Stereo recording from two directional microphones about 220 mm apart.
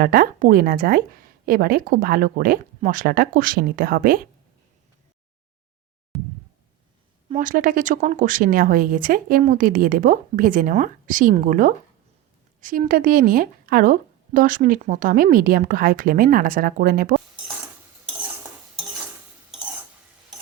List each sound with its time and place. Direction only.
0.0 s speech: 40° right (ahead or behind)
7.3 s speech: 35° right (ahead or behind)